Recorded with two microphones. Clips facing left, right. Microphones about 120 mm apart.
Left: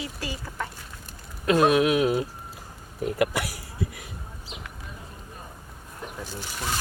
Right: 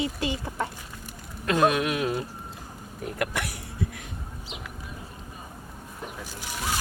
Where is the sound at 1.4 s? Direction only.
5° left (ahead or behind).